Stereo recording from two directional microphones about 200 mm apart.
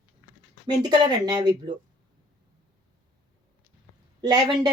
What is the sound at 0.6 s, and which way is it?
Speech, 20° right (ahead or behind).